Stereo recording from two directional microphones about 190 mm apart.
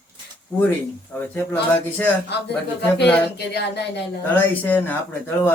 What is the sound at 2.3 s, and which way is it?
Speech, 60° left (ahead or behind).